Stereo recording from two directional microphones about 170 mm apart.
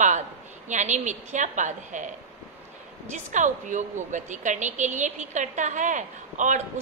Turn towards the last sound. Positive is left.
turn(degrees=-45)  # may be behind; listen again after turning